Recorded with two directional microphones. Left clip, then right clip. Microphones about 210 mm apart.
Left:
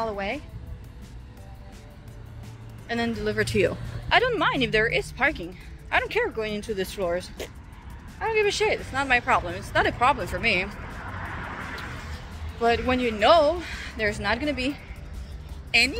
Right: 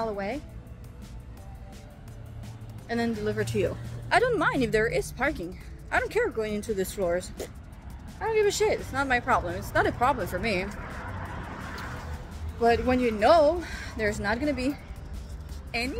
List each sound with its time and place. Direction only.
0.0 s speech: 10° right (ahead or behind)
2.9 s speech: 5° right (ahead or behind)
3.3 s speech: 15° left (ahead or behind)
4.1 s a woman's voice: 15° right (ahead or behind)
12.5 s a woman's voice: 20° right (ahead or behind)
15.7 s speech: centre (ahead or behind)